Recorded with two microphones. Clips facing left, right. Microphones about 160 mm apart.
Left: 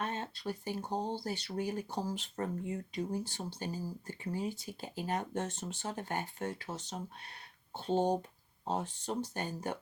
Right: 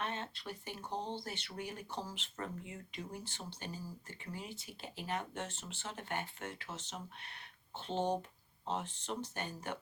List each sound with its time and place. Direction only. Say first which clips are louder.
0.0 s speech: left 4 dB; 40° left (ahead or behind)